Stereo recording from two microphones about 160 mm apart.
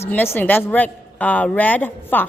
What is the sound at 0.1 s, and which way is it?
A woman's voice, 10° left (ahead or behind).